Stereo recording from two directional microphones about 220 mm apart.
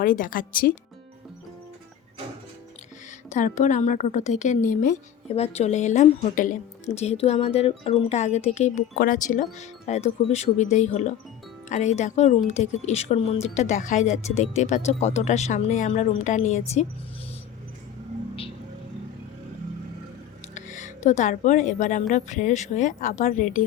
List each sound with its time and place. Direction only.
0.0 s a woman's voice: 35° left (ahead or behind)
3.3 s a woman's voice: 35° left (ahead or behind)
20.6 s a woman's voice: 35° left (ahead or behind)